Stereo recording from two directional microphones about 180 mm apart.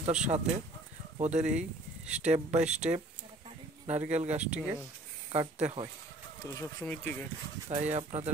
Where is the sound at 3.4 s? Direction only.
35° right (ahead or behind).